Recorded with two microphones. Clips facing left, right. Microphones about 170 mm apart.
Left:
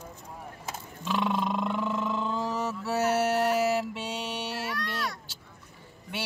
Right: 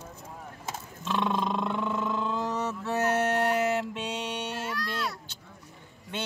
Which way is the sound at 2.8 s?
10° left (ahead or behind).